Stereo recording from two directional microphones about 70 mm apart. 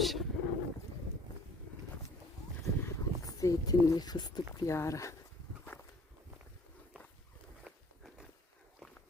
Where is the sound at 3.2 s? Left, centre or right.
Left.